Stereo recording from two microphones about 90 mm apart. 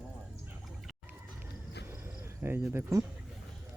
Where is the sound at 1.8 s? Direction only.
25° right (ahead or behind).